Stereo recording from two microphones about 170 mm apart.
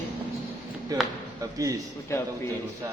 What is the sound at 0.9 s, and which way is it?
Speech, 20° right (ahead or behind).